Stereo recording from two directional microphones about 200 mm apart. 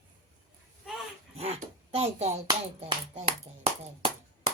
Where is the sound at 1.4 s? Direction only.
30° right (ahead or behind).